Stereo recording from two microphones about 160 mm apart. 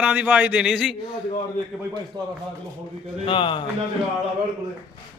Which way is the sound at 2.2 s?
25° right (ahead or behind).